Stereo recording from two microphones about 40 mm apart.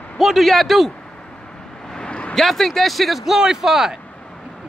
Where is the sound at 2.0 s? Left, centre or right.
Left.